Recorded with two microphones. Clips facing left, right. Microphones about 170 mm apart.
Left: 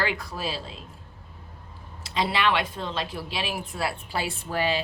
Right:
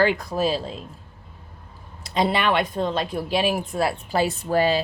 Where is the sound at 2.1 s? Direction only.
45° right (ahead or behind).